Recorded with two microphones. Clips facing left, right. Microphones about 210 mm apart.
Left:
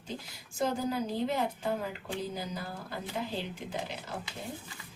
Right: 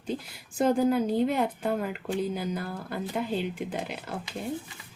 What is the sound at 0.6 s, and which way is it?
A woman's voice, 55° right (ahead or behind).